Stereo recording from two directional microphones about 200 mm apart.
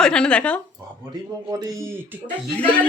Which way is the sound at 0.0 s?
5° left (ahead or behind).